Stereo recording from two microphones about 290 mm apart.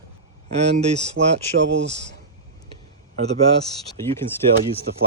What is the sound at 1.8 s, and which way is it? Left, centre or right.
Speech, right.